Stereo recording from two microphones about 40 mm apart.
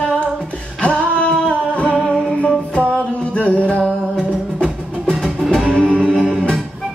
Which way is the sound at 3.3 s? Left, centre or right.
Left.